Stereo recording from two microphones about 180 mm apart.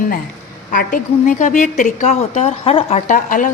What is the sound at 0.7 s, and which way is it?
A woman's voice, 50° left (ahead or behind).